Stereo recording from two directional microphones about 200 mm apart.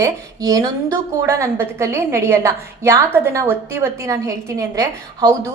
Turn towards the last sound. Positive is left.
turn(degrees=-15)  # may be behind; listen again after turning